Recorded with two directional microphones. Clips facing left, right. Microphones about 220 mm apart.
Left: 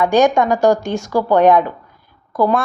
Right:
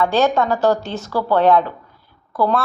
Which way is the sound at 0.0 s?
15° left (ahead or behind).